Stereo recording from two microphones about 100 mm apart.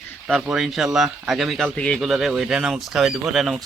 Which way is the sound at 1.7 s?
10° left (ahead or behind).